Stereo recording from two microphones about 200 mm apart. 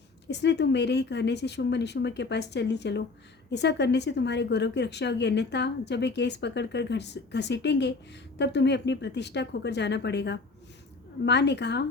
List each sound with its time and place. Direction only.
0.3 s a woman's voice: 60° left (ahead or behind)